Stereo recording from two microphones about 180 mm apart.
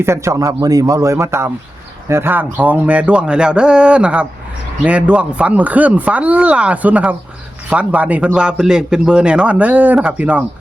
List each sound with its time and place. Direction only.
0.0 s a man's voice: 15° right (ahead or behind)